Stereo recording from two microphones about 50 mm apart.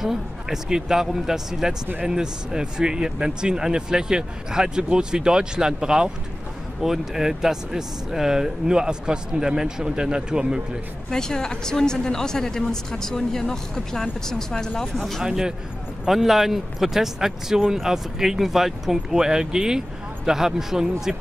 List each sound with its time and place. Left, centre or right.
0.0 s speech: centre
11.1 s speech: centre
15.2 s speech: centre